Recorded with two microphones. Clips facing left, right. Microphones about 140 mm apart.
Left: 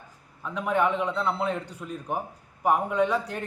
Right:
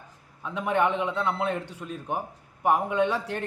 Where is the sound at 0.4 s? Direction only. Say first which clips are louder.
Even; centre (ahead or behind).